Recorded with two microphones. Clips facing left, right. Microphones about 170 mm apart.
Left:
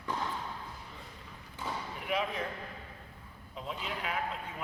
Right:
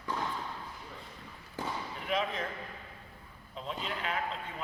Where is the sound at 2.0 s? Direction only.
10° left (ahead or behind).